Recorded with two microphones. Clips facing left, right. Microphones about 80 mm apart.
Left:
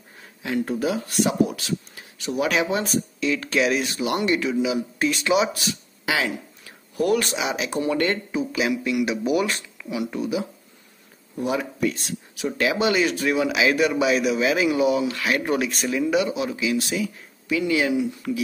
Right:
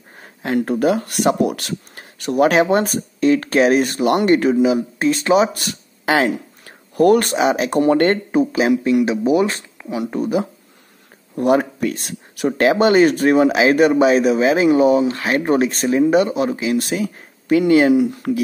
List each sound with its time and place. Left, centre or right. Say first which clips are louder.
0.2 s speech: right 6 dB; right
11.3 s speech: right 9 dB; right